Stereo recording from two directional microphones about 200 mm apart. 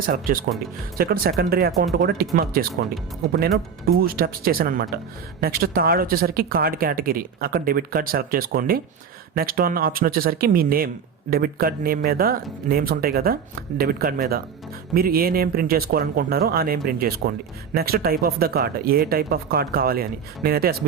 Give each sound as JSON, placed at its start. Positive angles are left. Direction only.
{"t": 0.1, "sound": "speech", "side_deg": -50}
{"t": 4.0, "sound": "speech", "side_deg": -45}